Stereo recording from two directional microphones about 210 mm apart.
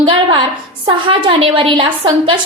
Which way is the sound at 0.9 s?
25° right (ahead or behind).